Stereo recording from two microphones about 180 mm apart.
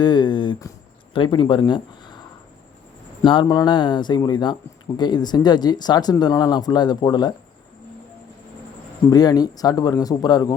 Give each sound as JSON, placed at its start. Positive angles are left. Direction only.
{"t": 0.0, "sound": "speech", "side_deg": 25}
{"t": 3.2, "sound": "speech", "side_deg": 25}
{"t": 9.0, "sound": "speech", "side_deg": 20}